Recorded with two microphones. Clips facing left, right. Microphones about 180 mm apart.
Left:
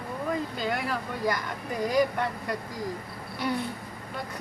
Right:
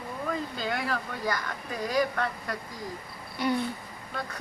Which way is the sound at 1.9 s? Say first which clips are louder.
Left 2 dB; 15° left (ahead or behind).